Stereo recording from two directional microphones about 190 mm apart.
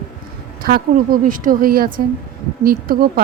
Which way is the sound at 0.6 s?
50° right (ahead or behind).